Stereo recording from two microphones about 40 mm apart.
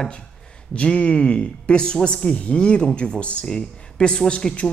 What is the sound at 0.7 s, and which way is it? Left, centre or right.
A man's voice, left.